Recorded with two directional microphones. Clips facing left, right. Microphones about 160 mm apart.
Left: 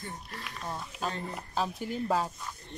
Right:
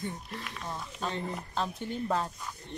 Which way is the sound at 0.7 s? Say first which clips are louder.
Even; 5° left (ahead or behind).